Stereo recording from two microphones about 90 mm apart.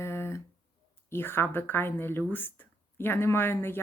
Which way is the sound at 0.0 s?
30° left (ahead or behind).